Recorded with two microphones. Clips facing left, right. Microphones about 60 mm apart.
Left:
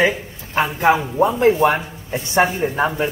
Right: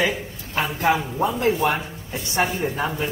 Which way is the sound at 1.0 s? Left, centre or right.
Centre.